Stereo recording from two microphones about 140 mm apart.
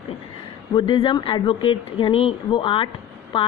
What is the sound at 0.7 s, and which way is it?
Speech, 35° left (ahead or behind).